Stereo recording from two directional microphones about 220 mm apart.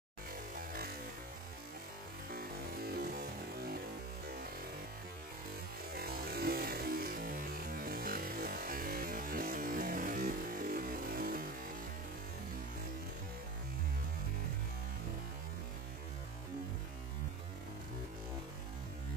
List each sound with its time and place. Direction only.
0.6 s music: 40° right (ahead or behind)
2.3 s music: 45° right (ahead or behind)
5.9 s music: 45° right (ahead or behind)